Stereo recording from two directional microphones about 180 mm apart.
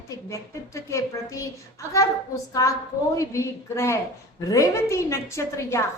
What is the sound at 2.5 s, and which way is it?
A woman's voice, 20° left (ahead or behind).